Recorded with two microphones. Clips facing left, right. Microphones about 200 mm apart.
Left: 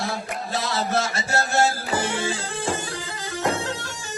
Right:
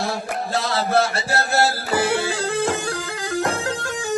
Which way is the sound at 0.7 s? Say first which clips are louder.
Right 5 dB; 35° right (ahead or behind).